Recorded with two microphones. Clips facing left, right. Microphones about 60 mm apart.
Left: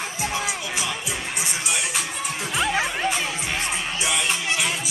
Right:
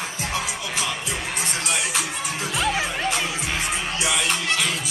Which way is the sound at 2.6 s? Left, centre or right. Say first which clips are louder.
Left 1 dB; centre.